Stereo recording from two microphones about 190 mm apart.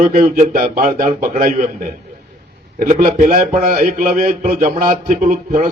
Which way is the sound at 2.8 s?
45° right (ahead or behind).